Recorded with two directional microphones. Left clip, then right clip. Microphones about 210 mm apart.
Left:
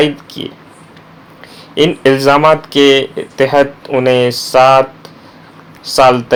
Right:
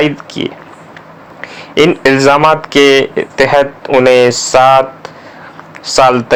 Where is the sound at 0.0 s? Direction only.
15° right (ahead or behind).